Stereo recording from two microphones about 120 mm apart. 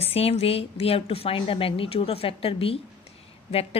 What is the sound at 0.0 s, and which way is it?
A woman's voice, 55° left (ahead or behind).